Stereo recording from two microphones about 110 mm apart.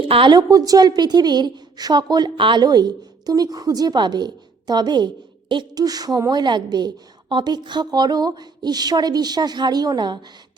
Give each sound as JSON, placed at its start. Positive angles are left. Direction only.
{"t": 0.0, "sound": "a woman's voice", "side_deg": -50}